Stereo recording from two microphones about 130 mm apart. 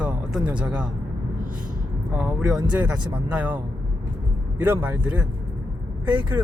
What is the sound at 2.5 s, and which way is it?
Speech, 30° right (ahead or behind).